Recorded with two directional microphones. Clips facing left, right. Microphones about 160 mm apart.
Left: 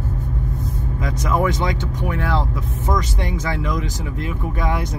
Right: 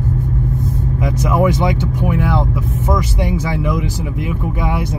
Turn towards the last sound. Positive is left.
turn(degrees=-10)  # may be behind; listen again after turning